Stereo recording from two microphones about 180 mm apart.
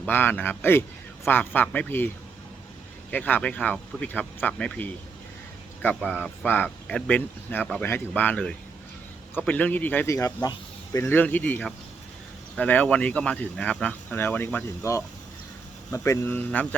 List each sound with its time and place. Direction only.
0.0 s speech: 10° left (ahead or behind)
3.1 s speech: 10° left (ahead or behind)